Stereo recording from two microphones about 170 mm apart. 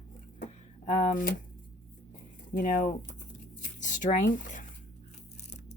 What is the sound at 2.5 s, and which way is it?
Speech, 55° left (ahead or behind).